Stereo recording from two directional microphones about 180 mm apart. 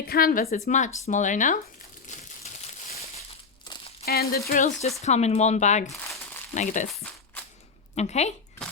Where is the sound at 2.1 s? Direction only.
40° left (ahead or behind).